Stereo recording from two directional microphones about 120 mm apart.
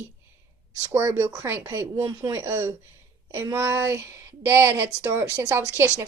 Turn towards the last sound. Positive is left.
turn(degrees=-20)  # may be behind; listen again after turning